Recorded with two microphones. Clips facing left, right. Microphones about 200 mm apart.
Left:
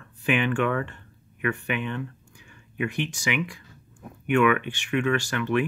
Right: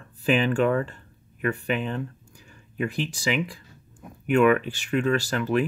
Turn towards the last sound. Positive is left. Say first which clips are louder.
# right 1 dB
turn(degrees=-35)  # may be behind; listen again after turning